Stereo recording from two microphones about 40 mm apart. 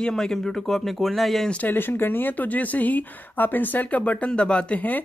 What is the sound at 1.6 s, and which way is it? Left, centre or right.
Speech, left.